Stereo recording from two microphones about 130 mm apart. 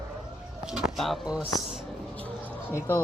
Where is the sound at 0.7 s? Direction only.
5° right (ahead or behind).